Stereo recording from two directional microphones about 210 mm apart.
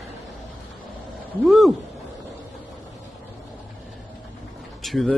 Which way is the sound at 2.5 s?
Centre (ahead or behind).